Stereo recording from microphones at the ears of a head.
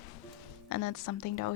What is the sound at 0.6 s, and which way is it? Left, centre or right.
Speech, left.